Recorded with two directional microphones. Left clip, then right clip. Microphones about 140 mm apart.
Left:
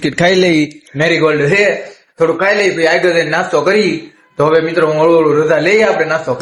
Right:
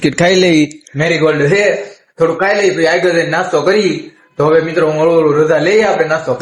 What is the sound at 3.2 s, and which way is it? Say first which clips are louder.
Speech: even; 30° left (ahead or behind).